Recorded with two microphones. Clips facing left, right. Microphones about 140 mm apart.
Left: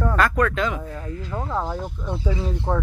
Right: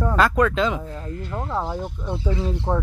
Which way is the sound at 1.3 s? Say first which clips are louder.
Even; centre (ahead or behind).